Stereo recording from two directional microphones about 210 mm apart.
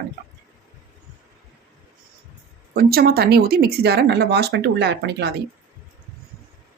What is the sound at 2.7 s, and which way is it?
Speech, 45° right (ahead or behind).